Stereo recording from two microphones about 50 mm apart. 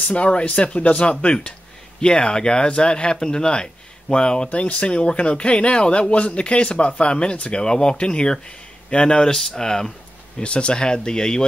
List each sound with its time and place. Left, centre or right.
0.1 s speech: left